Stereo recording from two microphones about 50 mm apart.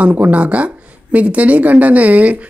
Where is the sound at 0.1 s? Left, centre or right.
Right.